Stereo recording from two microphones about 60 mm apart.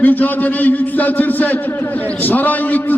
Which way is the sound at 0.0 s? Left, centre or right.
Left.